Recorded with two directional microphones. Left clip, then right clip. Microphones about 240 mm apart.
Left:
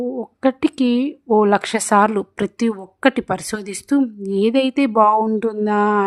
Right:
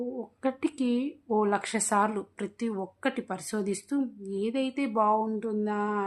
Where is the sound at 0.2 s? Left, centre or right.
Left.